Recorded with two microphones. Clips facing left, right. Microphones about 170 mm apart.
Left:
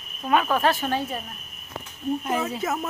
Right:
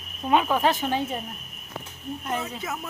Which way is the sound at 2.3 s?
5° left (ahead or behind).